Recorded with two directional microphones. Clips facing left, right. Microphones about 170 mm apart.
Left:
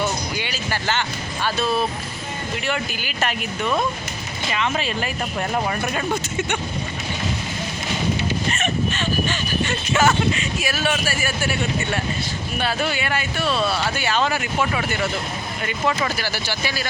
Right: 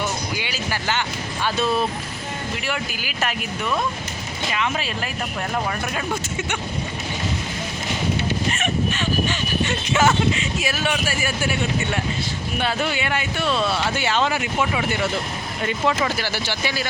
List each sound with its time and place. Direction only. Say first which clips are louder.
0.3 s music: left 1 dB; 10° right (ahead or behind)
2.6 s speech: left 2 dB; 5° right (ahead or behind)
4.5 s speech: left 2 dB; 5° right (ahead or behind)
5.9 s speech: left 2 dB; 5° right (ahead or behind)
8.5 s speech: even; 10° right (ahead or behind)
12.9 s speech: even; 20° right (ahead or behind)
13.4 s speech: even; 10° left (ahead or behind)
13.9 s speech: even; 20° right (ahead or behind)
16.1 s speech: right 1 dB; 20° right (ahead or behind)